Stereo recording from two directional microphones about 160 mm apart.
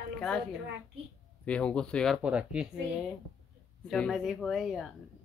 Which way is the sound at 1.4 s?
5° left (ahead or behind).